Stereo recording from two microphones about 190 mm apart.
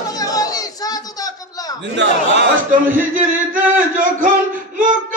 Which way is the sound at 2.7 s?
45° right (ahead or behind).